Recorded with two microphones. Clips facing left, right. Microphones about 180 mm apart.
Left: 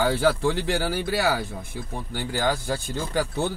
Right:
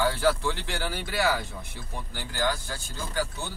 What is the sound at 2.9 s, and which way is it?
Speech, 80° left.